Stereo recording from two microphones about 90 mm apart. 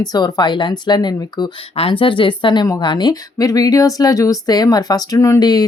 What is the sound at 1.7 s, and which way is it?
Speech, 85° left.